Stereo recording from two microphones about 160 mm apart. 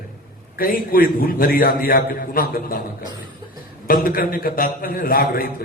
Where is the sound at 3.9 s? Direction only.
65° left (ahead or behind).